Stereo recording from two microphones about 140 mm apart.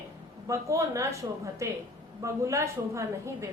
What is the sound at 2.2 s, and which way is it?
A woman's voice, 20° right (ahead or behind).